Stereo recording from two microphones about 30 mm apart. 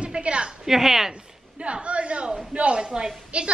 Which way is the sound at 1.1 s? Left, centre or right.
Right.